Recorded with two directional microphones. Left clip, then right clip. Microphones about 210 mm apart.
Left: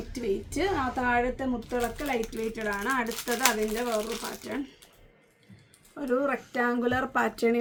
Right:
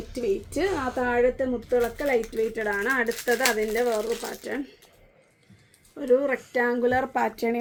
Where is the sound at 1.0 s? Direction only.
15° left (ahead or behind).